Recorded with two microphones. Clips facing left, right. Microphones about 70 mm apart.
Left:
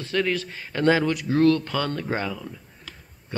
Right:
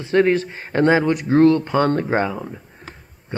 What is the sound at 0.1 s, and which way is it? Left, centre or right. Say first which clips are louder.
Speech: right 9 dB; right.